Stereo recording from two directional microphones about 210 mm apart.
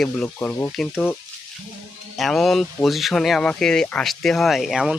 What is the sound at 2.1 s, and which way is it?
Speech, centre (ahead or behind).